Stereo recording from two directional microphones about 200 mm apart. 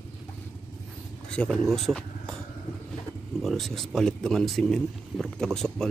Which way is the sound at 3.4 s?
Centre (ahead or behind).